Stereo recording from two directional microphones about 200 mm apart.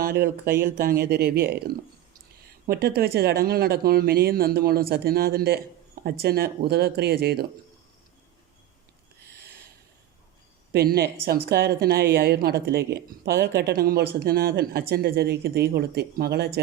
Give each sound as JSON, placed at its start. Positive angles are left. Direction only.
{"t": 0.0, "sound": "a woman's voice", "side_deg": -50}
{"t": 10.7, "sound": "a woman's voice", "side_deg": -50}